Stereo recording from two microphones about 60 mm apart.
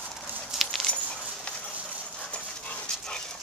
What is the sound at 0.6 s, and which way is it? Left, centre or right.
Dog, centre.